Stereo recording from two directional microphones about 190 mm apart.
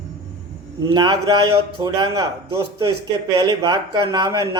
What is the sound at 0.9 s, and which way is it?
Speech, 20° right (ahead or behind).